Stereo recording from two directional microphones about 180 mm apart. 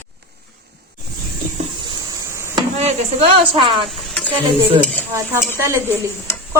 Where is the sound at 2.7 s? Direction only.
35° right (ahead or behind).